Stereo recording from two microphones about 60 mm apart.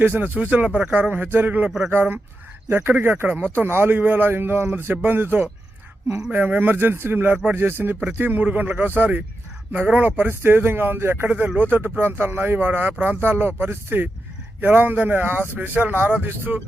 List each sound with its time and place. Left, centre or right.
0.0 s speech: right